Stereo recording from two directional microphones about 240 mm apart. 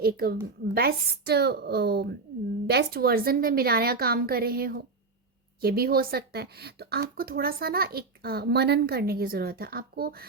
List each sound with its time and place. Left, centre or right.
0.0 s a child's voice: right